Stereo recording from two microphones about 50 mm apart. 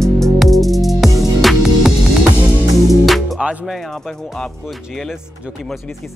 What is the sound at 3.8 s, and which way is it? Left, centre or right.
Speech, centre.